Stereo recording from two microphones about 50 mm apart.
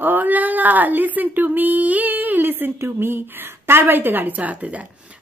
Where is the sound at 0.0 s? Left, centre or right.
Right.